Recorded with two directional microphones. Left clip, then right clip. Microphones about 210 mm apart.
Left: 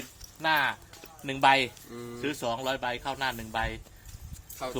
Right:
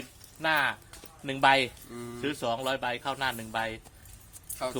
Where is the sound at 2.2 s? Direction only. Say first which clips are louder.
Right 1 dB; centre (ahead or behind).